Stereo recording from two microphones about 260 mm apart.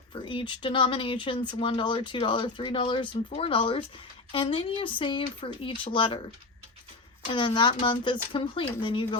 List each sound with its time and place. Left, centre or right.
0.1 s speech: centre
7.3 s speech: centre